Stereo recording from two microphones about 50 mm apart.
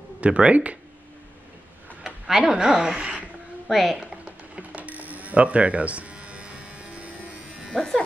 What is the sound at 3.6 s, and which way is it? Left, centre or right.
Speech, centre.